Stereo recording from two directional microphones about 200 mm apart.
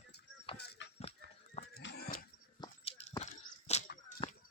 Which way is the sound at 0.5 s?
55° left (ahead or behind).